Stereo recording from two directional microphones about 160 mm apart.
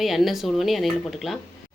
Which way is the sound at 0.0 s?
Centre (ahead or behind).